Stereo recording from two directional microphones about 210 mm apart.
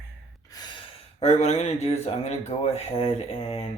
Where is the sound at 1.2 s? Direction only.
30° left (ahead or behind).